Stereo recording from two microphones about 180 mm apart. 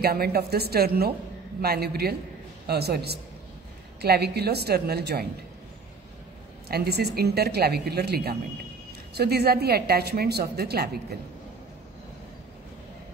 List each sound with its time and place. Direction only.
0.0 s a woman's voice: 60° right (ahead or behind)
6.7 s a woman's voice: 60° right (ahead or behind)